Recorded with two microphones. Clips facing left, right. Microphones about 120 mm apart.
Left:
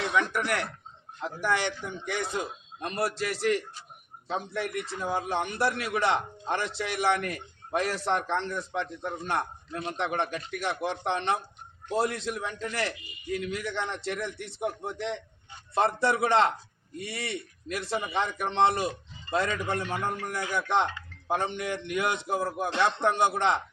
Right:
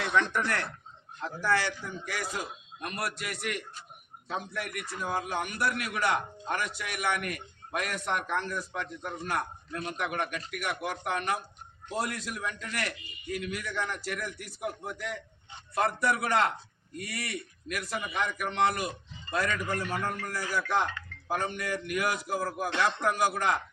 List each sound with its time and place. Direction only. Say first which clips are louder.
0.1 s a man's voice: right 1 dB; 10° left (ahead or behind); by 23.6 s 25° left (ahead or behind)